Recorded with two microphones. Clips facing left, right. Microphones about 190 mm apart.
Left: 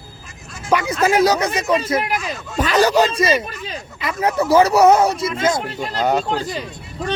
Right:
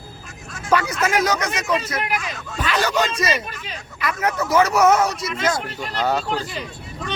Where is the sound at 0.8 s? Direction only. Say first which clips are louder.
Left 5 dB; 30° left (ahead or behind).